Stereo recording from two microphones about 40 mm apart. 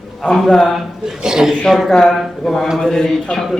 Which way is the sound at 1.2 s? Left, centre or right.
Centre.